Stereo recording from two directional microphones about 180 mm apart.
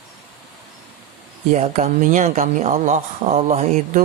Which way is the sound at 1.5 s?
40° right (ahead or behind).